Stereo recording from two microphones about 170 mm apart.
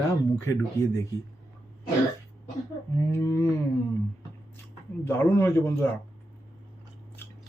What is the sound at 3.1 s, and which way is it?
Speech, 15° left (ahead or behind).